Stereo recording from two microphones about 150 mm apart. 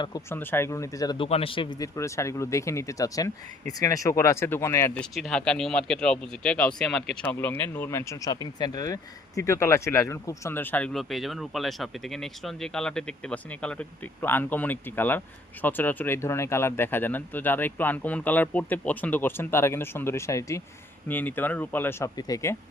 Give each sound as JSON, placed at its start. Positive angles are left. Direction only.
{"t": 0.3, "sound": "speech", "side_deg": 15}
{"t": 1.2, "sound": "a man's voice", "side_deg": 40}
{"t": 1.8, "sound": "speech", "side_deg": 20}
{"t": 4.9, "sound": "speech", "side_deg": 0}